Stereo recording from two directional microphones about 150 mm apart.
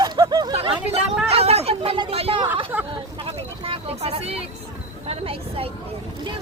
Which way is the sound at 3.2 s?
40° right (ahead or behind).